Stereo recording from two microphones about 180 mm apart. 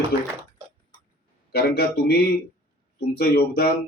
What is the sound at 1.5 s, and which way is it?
Speech, 60° left (ahead or behind).